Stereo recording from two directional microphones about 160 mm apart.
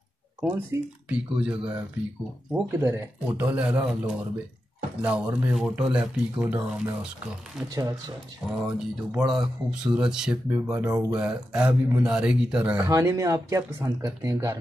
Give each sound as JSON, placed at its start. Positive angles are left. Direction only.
{"t": 0.4, "sound": "speech", "side_deg": -10}
{"t": 8.5, "sound": "speech", "side_deg": -5}
{"t": 12.9, "sound": "speech", "side_deg": -20}